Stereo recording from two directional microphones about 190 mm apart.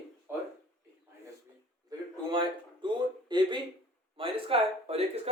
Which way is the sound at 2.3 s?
25° right (ahead or behind).